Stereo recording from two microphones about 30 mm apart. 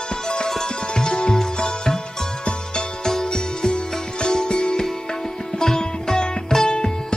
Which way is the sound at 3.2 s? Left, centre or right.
Left.